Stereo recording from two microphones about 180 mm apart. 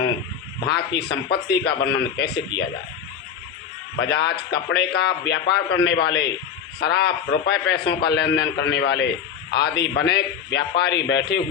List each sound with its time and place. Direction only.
0.6 s a man's voice: 65° left (ahead or behind)
1.8 s a man's voice: 75° left (ahead or behind)
3.9 s a man's voice: 65° left (ahead or behind)